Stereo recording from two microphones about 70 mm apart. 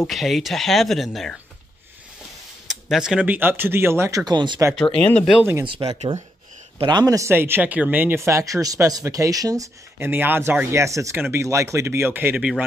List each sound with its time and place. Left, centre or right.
0.0 s speech: centre
2.7 s a sound: centre
3.2 s speech: right
4.3 s speech: right
4.7 s speech: centre
5.8 s speech: right
7.3 s speech: right
8.2 s speech: right
9.9 s speech: right
10.7 s speech: right
11.1 s speech: right
12.4 s speech: centre